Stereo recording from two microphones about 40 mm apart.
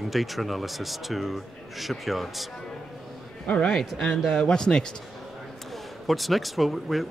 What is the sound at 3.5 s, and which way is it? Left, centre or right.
Speech, left.